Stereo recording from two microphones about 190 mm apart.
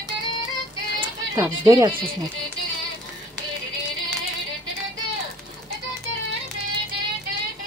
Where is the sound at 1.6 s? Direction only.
20° right (ahead or behind).